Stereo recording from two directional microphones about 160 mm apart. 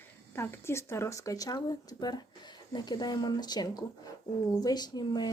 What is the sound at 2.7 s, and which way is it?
Speech, 25° left (ahead or behind).